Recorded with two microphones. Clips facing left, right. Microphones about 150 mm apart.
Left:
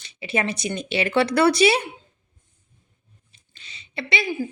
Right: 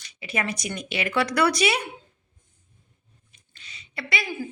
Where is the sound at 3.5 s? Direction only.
25° left (ahead or behind).